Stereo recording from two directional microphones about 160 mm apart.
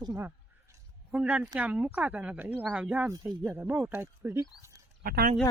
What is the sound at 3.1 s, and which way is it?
Speech, 20° right (ahead or behind).